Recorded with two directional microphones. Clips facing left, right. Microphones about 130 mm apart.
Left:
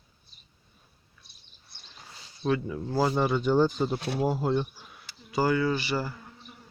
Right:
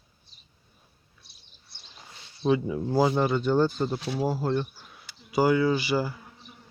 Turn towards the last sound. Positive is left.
turn(degrees=-5)  # may be behind; listen again after turning